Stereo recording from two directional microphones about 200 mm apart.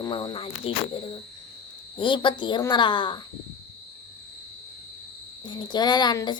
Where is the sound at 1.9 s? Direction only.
25° left (ahead or behind).